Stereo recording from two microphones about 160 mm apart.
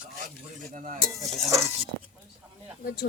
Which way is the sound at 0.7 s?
55° right (ahead or behind).